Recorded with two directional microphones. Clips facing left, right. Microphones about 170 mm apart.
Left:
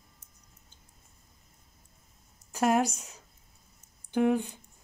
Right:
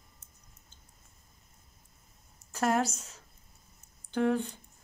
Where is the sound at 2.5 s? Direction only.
15° left (ahead or behind).